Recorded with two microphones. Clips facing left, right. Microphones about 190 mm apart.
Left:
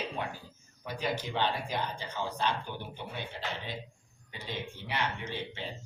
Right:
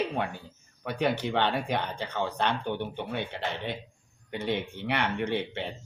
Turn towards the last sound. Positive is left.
turn(degrees=-65)  # may be behind; listen again after turning